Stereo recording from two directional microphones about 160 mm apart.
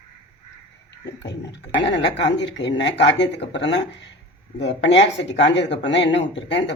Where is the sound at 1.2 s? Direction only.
90° left.